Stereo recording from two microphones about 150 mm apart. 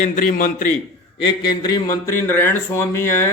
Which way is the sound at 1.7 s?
20° left (ahead or behind).